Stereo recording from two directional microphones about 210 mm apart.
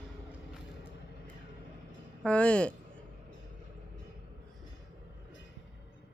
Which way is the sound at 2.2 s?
5° left (ahead or behind).